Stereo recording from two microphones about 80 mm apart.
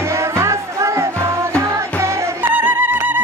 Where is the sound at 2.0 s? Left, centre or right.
Right.